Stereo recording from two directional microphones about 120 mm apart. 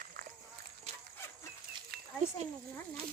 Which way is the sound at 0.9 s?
65° right (ahead or behind).